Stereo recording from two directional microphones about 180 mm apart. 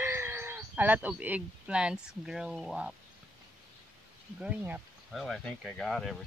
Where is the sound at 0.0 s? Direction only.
15° right (ahead or behind).